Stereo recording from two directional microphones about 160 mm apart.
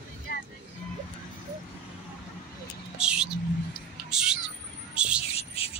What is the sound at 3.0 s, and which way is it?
Vehicle, 5° right (ahead or behind).